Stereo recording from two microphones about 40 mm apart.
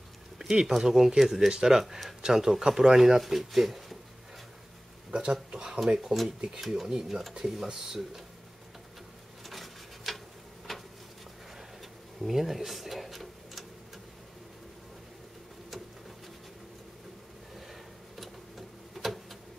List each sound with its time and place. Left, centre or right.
0.5 s speech: centre
5.1 s speech: right
5.9 s speech: centre
9.4 s a sound: centre
12.2 s drawer open or close: centre
19.0 s a sound: centre